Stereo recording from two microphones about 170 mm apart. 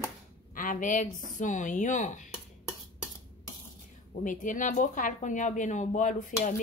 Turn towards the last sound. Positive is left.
turn(degrees=50)  # may be behind; listen again after turning